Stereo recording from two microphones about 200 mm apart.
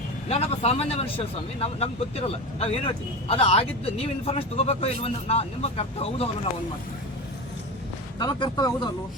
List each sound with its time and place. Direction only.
0.3 s speech: 30° left (ahead or behind)
8.2 s speech: 20° left (ahead or behind)